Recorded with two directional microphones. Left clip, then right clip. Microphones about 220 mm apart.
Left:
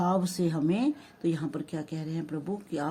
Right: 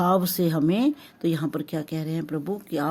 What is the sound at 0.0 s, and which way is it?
Speech, 40° right (ahead or behind).